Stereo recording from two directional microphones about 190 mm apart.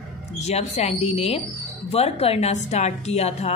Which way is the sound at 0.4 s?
35° left (ahead or behind).